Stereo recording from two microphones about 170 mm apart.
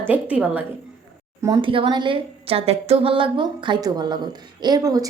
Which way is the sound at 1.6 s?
30° right (ahead or behind).